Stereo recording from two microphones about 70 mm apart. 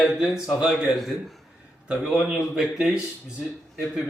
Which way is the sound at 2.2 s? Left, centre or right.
Centre.